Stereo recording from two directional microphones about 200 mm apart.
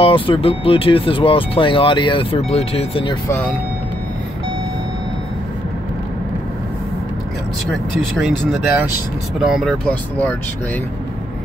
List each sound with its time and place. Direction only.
0.0 s speech: 25° left (ahead or behind)
3.3 s speech: 10° left (ahead or behind)
8.2 s speech: centre (ahead or behind)